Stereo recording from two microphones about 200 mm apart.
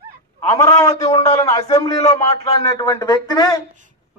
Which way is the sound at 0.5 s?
20° left (ahead or behind).